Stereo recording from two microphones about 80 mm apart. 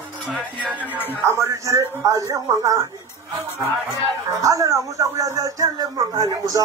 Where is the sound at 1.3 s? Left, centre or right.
Right.